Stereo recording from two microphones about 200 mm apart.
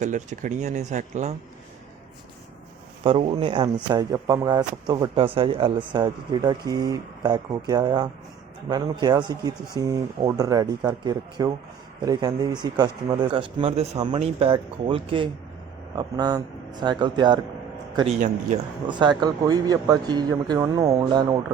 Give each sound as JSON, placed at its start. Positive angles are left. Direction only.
{"t": 0.0, "sound": "speech", "side_deg": -35}
{"t": 3.0, "sound": "speech", "side_deg": -25}
{"t": 18.9, "sound": "speech", "side_deg": -20}